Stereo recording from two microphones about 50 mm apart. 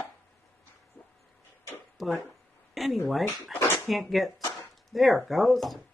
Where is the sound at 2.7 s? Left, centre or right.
Centre.